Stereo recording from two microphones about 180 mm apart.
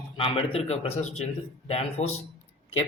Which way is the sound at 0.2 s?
30° left (ahead or behind).